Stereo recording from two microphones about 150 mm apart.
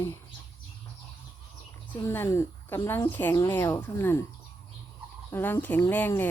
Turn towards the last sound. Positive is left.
turn(degrees=15)  # may be behind; listen again after turning